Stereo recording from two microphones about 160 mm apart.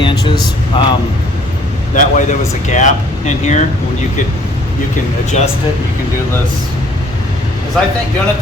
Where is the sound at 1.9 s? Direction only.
50° left (ahead or behind).